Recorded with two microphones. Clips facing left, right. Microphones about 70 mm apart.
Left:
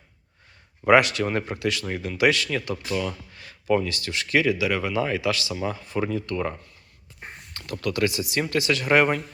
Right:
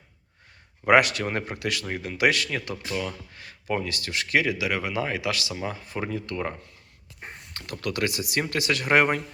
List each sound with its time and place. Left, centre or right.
0.9 s speech: right
1.2 s speech: right
1.5 s speech: right
3.3 s a sound: right
3.8 s speech: right
5.5 s speech: right
7.6 s speech: right